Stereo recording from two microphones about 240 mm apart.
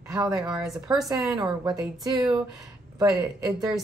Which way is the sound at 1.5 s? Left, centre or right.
Centre.